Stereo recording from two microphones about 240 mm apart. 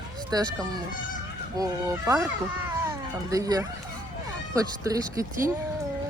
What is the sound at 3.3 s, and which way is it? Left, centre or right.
Speech, centre.